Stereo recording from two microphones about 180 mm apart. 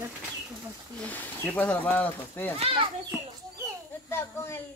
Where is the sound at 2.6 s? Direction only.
30° right (ahead or behind).